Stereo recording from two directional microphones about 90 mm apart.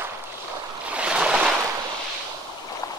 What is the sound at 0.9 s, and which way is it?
Stream, 10° right (ahead or behind).